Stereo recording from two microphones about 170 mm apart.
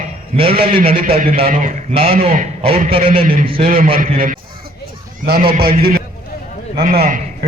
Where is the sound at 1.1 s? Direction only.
55° right (ahead or behind).